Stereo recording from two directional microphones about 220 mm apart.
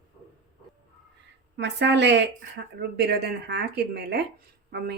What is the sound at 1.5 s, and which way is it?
Speech, 50° right (ahead or behind).